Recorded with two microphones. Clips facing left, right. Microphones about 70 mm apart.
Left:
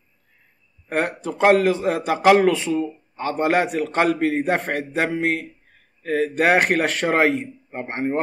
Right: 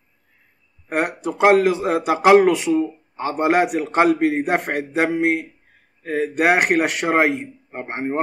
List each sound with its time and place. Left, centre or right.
0.8 s a man's voice: right
6.3 s speech: centre